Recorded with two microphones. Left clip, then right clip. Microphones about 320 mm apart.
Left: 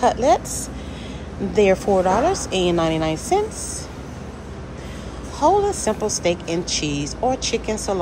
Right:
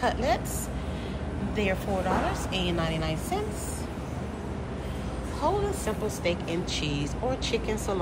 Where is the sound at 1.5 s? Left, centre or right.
Centre.